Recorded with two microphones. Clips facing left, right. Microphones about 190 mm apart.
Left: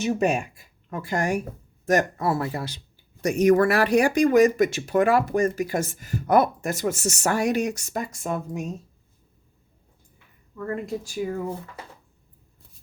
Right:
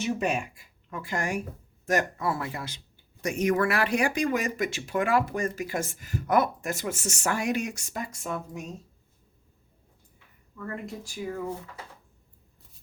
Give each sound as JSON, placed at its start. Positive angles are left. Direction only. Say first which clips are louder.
{"t": 0.0, "sound": "speech", "louder": "left 5 dB", "side_deg": 45}
{"t": 11.2, "sound": "speech", "louder": "left 5 dB", "side_deg": 50}